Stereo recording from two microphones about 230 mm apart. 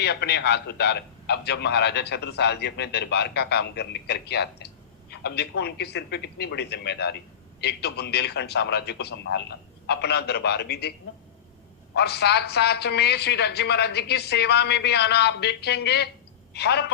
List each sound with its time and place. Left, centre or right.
0.0 s a man's voice: left
11.9 s a man's voice: left